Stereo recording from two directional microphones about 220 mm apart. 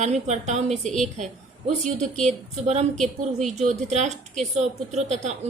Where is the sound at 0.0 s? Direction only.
30° right (ahead or behind).